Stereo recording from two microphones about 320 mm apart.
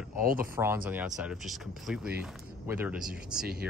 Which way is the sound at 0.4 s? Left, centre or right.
Centre.